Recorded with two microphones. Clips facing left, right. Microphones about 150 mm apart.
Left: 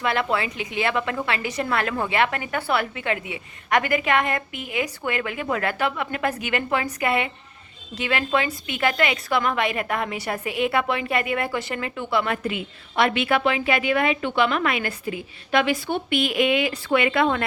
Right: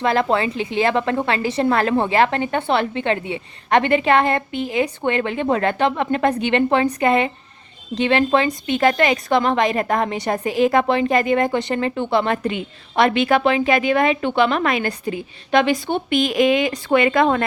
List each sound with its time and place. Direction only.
0.0 s a woman's voice: 35° right (ahead or behind)